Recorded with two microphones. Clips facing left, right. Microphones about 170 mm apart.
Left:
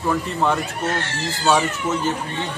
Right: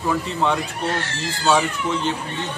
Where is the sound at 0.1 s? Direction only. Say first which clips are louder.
Left 1 dB; centre (ahead or behind).